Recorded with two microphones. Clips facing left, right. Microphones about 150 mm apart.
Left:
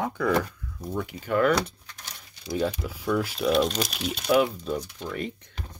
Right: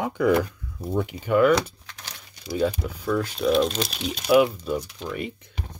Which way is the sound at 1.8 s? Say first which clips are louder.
Right 3 dB; 90° right.